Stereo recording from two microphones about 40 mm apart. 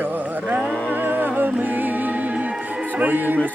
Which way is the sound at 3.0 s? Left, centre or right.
Right.